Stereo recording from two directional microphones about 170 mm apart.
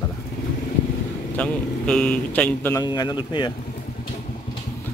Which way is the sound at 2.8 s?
25° left (ahead or behind).